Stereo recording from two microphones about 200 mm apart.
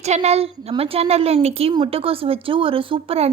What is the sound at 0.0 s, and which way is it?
A woman's voice, 35° right (ahead or behind).